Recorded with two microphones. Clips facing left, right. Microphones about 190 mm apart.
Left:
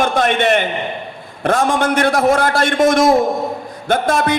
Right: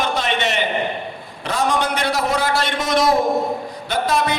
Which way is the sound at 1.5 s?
50° left (ahead or behind).